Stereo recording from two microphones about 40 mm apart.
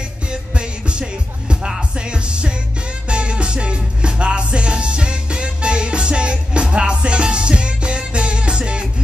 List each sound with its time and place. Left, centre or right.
0.3 s music: right